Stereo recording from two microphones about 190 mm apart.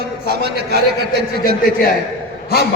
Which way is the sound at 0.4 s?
60° right (ahead or behind).